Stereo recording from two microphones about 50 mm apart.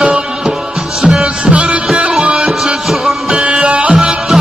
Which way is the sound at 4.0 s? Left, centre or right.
Centre.